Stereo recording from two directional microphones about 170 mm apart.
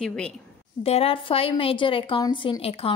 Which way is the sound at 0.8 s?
35° left (ahead or behind).